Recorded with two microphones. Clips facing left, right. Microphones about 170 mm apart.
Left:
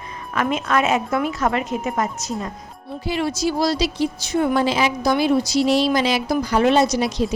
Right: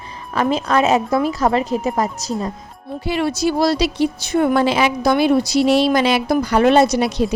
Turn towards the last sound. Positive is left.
turn(degrees=-60)  # may be behind; listen again after turning